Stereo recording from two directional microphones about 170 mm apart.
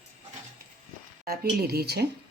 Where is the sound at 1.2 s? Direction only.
65° right (ahead or behind).